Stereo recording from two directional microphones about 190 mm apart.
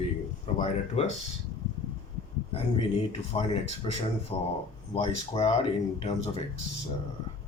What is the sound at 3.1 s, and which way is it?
Speech, 30° left (ahead or behind).